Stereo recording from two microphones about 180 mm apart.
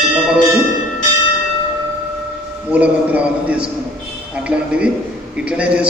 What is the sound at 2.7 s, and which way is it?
A man's voice, 10° right (ahead or behind).